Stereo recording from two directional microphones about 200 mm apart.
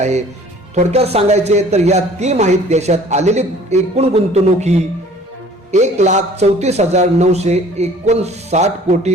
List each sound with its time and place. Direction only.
0.0 s speech: 35° right (ahead or behind)